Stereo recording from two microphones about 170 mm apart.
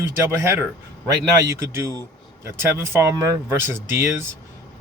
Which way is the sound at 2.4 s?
15° right (ahead or behind).